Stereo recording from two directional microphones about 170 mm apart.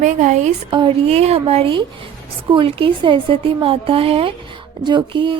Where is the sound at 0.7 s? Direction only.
35° right (ahead or behind).